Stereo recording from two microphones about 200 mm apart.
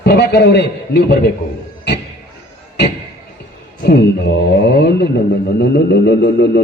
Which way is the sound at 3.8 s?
55° left (ahead or behind).